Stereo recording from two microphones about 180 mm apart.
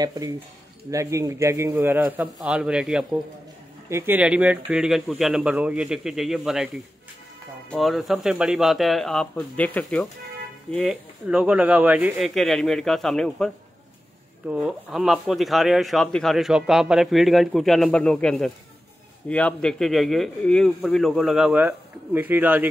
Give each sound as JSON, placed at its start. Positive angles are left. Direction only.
{"t": 0.0, "sound": "a man's voice", "side_deg": -20}
{"t": 14.5, "sound": "speech", "side_deg": -5}